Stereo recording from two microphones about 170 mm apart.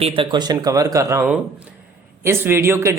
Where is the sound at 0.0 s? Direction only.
30° right (ahead or behind).